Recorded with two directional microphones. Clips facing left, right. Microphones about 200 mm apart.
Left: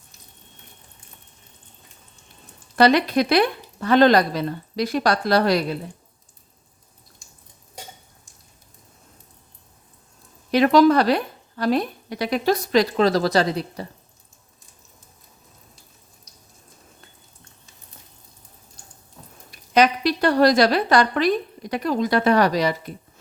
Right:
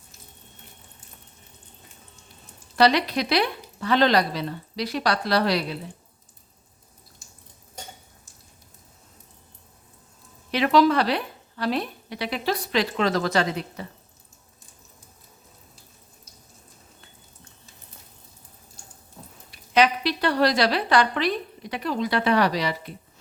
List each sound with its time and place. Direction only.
2.7 s a woman's voice: 50° left (ahead or behind)
10.5 s a woman's voice: 45° left (ahead or behind)
19.5 s a woman's voice: 45° left (ahead or behind)